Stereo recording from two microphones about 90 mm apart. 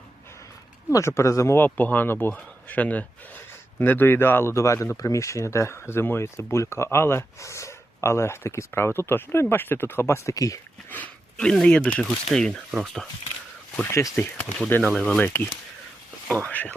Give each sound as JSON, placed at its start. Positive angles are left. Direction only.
{"t": 0.9, "sound": "speech", "side_deg": 30}
{"t": 1.6, "sound": "a man's voice", "side_deg": 20}
{"t": 10.3, "sound": "speech", "side_deg": 40}
{"t": 11.3, "sound": "a man's voice", "side_deg": 10}
{"t": 13.8, "sound": "speech", "side_deg": 35}
{"t": 14.2, "sound": "a man's voice", "side_deg": 15}
{"t": 14.8, "sound": "speech", "side_deg": 5}
{"t": 15.2, "sound": "a man's voice", "side_deg": 25}